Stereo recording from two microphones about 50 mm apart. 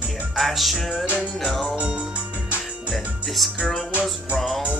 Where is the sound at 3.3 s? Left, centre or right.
Centre.